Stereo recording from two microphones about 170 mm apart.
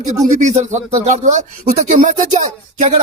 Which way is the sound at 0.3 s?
45° right (ahead or behind).